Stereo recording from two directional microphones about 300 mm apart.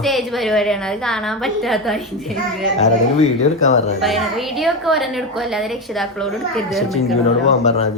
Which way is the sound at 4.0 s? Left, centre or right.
Centre.